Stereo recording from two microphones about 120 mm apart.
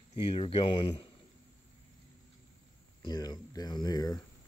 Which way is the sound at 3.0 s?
35° left (ahead or behind).